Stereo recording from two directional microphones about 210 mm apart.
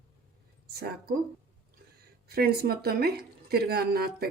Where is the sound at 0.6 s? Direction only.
50° right (ahead or behind).